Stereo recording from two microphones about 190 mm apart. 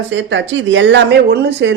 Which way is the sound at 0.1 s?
70° right (ahead or behind).